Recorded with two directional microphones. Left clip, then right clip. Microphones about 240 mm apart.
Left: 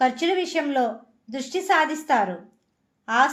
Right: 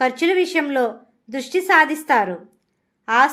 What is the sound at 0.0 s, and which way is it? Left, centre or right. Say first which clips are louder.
A woman's voice: right 4 dB; right.